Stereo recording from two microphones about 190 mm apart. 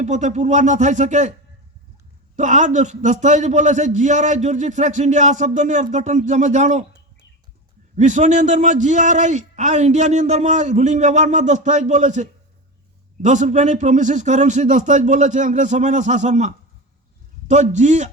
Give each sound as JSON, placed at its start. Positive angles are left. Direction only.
{"t": 0.0, "sound": "a man's voice", "side_deg": -40}
{"t": 2.3, "sound": "a man's voice", "side_deg": -40}
{"t": 7.9, "sound": "a man's voice", "side_deg": -40}